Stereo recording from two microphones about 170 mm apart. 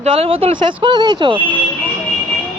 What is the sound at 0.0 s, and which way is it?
A woman's voice, 35° right (ahead or behind).